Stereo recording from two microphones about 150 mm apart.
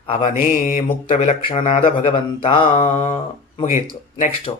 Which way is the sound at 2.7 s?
55° left (ahead or behind).